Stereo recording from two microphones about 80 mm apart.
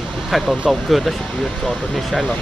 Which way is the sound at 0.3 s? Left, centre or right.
Centre.